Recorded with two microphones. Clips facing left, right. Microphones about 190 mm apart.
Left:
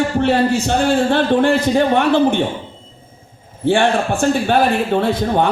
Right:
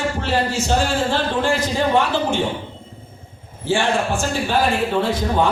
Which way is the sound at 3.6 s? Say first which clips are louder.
Left 5 dB; 60° left (ahead or behind).